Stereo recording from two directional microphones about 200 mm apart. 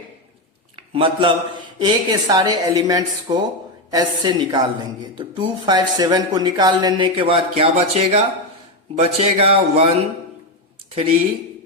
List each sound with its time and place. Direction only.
0.9 s speech: 25° right (ahead or behind)